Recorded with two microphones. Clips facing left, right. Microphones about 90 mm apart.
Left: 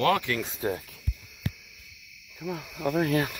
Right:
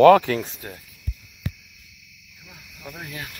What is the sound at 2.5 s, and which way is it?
Speech, 90° left.